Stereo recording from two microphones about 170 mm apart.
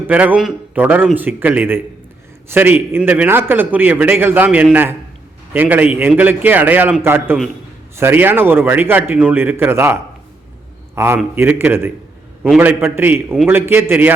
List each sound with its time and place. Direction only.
0.1 s a man's voice: 10° right (ahead or behind)
13.2 s a man's voice: centre (ahead or behind)
13.5 s a man's voice: 15° right (ahead or behind)